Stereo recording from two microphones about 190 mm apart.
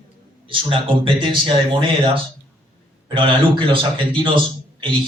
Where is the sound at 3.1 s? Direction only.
25° right (ahead or behind).